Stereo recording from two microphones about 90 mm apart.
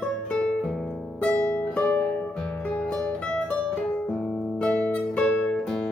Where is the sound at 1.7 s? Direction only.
15° left (ahead or behind).